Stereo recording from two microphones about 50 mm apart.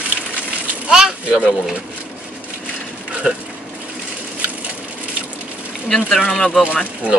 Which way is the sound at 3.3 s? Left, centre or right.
Centre.